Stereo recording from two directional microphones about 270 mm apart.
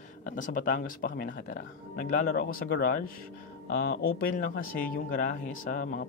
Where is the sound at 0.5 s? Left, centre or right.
Left.